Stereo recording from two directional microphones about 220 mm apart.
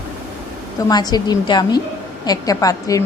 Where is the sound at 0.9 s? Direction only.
20° left (ahead or behind).